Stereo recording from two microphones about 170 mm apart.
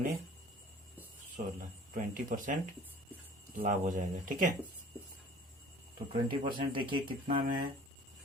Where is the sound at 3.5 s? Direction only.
50° right (ahead or behind).